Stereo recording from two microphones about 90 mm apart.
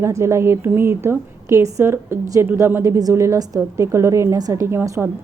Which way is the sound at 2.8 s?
40° right (ahead or behind).